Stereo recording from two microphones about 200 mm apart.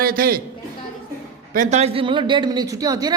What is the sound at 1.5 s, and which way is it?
A man's voice, 35° right (ahead or behind).